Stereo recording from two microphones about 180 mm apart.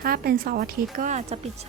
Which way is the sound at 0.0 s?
55° right (ahead or behind).